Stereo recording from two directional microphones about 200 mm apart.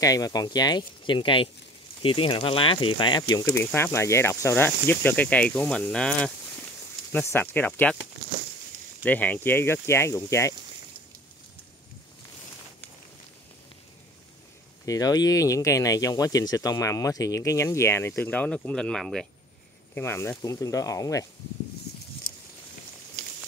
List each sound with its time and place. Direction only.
0.0 s speech: 15° left (ahead or behind)
9.0 s speech: 10° left (ahead or behind)
14.9 s speech: 20° left (ahead or behind)